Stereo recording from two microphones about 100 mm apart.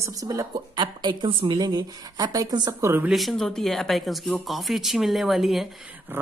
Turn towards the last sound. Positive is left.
turn(degrees=0)  # may be behind; listen again after turning